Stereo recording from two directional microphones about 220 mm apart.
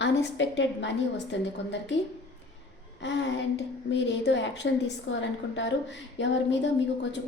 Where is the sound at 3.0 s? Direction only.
55° left (ahead or behind).